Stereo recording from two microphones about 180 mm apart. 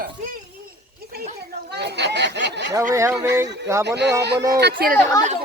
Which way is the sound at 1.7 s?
70° right (ahead or behind).